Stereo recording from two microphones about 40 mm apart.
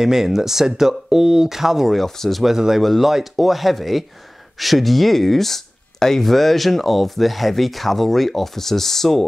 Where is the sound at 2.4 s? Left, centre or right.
Centre.